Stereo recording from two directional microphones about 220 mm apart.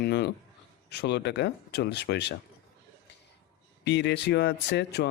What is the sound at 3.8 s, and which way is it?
Speech, 50° left (ahead or behind).